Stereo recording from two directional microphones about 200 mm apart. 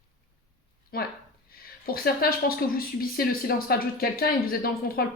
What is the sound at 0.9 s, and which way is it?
Speech, 50° left (ahead or behind).